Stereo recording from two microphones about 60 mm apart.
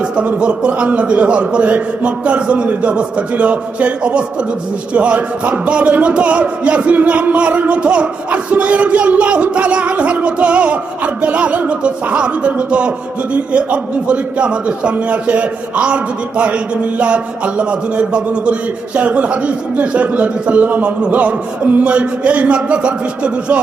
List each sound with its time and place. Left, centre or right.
0.0 s speech: centre
17.0 s speech: centre